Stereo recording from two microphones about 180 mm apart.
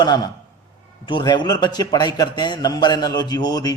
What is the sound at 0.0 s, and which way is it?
Speech, 20° left (ahead or behind).